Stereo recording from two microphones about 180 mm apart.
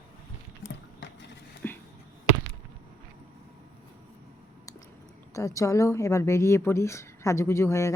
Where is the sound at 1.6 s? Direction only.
10° left (ahead or behind).